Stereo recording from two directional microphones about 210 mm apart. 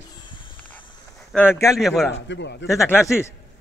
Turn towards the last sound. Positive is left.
turn(degrees=10)  # may be behind; listen again after turning